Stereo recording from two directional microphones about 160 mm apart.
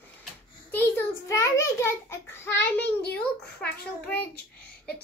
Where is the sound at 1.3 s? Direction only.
15° left (ahead or behind).